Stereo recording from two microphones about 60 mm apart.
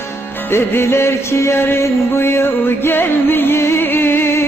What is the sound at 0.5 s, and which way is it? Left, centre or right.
Music, left.